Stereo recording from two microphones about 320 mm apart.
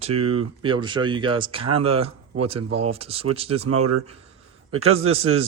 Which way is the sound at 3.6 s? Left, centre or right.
Right.